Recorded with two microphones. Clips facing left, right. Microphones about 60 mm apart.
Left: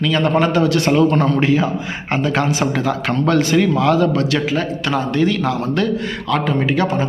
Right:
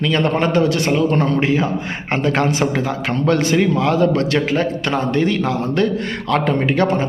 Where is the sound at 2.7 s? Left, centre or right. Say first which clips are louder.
Left 1 dB; right.